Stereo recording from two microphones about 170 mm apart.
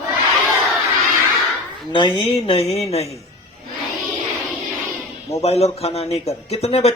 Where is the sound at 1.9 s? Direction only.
30° left (ahead or behind).